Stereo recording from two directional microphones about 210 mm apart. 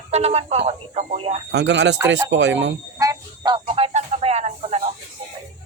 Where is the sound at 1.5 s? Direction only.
55° right (ahead or behind).